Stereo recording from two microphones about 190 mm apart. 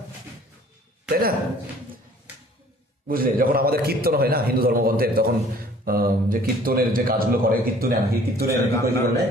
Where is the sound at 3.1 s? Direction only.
50° right (ahead or behind).